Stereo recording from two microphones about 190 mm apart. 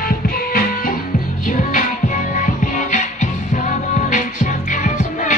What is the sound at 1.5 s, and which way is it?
Music, 40° left (ahead or behind).